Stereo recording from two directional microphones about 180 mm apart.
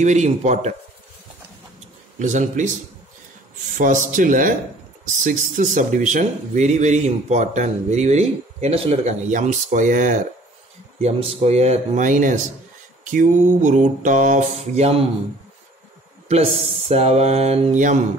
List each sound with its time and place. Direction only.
0.0 s speech: 40° right (ahead or behind)
2.1 s mantra: 45° right (ahead or behind)
3.7 s mantra: 45° right (ahead or behind)
5.2 s speech: 45° right (ahead or behind)
11.0 s speech: 35° right (ahead or behind)
13.0 s mantra: 45° right (ahead or behind)
16.3 s speech: 35° right (ahead or behind)